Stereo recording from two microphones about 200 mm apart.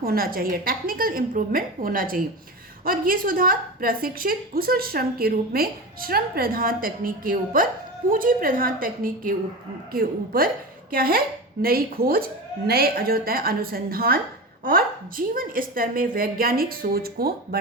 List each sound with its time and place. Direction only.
0.0 s a woman's voice: 45° right (ahead or behind)